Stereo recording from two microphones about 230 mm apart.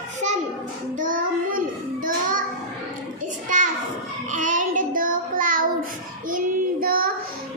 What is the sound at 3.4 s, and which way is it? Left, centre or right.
Children playing, right.